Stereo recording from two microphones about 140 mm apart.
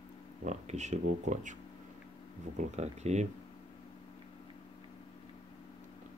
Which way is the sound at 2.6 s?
55° right (ahead or behind).